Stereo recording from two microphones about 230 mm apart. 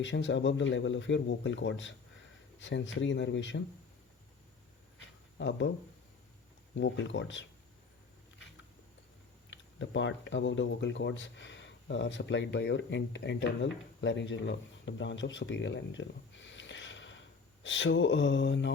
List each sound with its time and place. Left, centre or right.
0.0 s speech: left
4.9 s a sound: left
6.7 s speech: left
9.5 s speech: left